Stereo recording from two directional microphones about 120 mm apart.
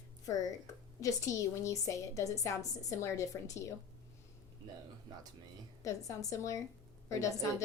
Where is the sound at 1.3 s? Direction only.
25° left (ahead or behind).